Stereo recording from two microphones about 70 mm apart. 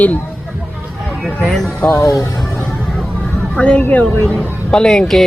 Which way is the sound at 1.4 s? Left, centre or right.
Centre.